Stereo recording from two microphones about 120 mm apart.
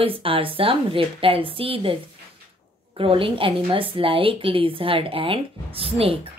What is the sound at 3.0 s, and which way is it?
Speech, 50° right (ahead or behind).